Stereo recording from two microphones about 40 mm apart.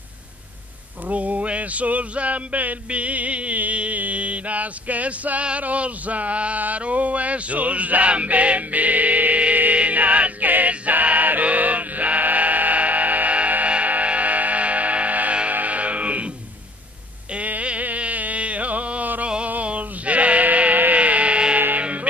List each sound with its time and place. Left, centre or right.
1.0 s male singing: right
3.7 s music: right
17.3 s music: right
19.6 s bleat: right
20.9 s music: right
21.5 s music: right